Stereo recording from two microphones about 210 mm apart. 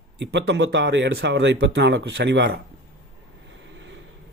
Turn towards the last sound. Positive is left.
turn(degrees=-60)  # may be behind; listen again after turning